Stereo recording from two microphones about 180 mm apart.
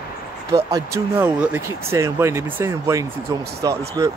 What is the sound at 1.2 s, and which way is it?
Speech, 10° right (ahead or behind).